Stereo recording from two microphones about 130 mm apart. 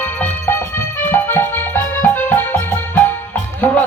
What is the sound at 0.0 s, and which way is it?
Music, 15° left (ahead or behind).